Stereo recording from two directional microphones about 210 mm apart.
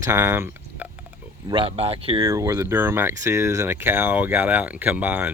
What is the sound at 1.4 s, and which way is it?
Speech, 25° right (ahead or behind).